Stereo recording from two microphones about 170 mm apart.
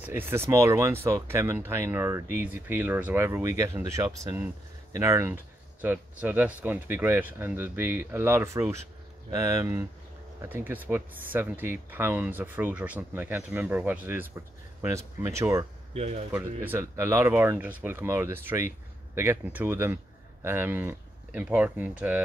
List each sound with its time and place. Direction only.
0.0 s speech: 10° right (ahead or behind)
15.9 s speech: 40° right (ahead or behind)
16.3 s speech: 10° right (ahead or behind)